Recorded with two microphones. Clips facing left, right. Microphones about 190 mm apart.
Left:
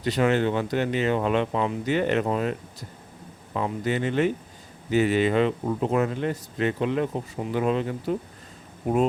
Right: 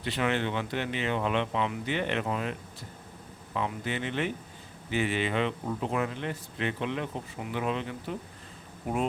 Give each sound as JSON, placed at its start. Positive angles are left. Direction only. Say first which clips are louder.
{"t": 0.0, "sound": "speech", "louder": "left 7 dB", "side_deg": 40}